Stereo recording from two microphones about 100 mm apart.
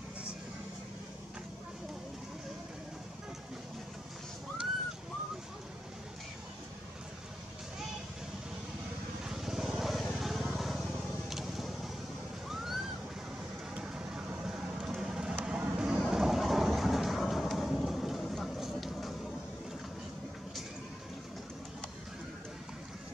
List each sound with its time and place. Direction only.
9.3 s vehicle: 5° right (ahead or behind)
12.4 s a sound: 5° right (ahead or behind)
13.7 s vehicle: 10° right (ahead or behind)
16.1 s train: 5° right (ahead or behind)